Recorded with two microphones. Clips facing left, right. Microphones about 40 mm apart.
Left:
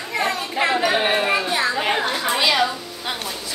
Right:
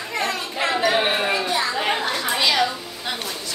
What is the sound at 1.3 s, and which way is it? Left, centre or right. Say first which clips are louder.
Children playing: left 2 dB; centre.